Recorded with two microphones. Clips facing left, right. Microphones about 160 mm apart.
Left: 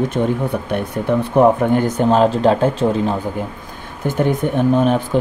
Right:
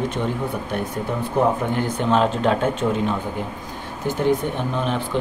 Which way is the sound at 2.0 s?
40° left (ahead or behind).